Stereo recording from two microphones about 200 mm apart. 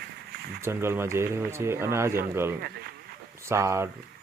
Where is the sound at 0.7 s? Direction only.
10° right (ahead or behind).